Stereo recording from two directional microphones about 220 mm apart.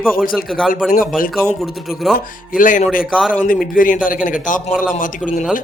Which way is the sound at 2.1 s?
40° left (ahead or behind).